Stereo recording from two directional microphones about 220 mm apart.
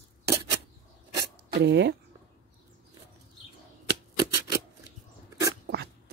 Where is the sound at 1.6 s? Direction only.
50° right (ahead or behind).